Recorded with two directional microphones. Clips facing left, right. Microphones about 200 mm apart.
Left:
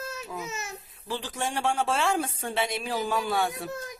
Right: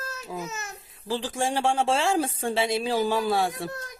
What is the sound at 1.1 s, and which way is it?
Speech, 30° right (ahead or behind).